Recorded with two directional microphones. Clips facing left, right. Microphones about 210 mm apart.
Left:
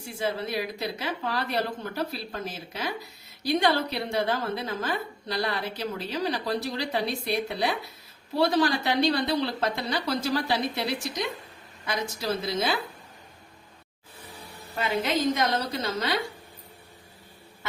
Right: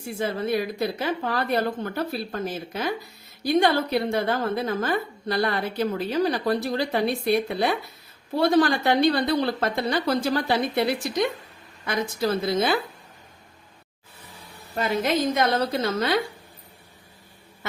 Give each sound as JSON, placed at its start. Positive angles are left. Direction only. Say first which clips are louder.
{"t": 0.0, "sound": "a woman's voice", "louder": "right 3 dB", "side_deg": -55}
{"t": 14.8, "sound": "a woman's voice", "louder": "right 3 dB", "side_deg": -45}